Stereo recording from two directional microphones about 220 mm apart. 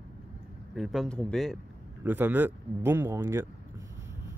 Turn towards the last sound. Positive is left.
turn(degrees=-10)  # may be behind; listen again after turning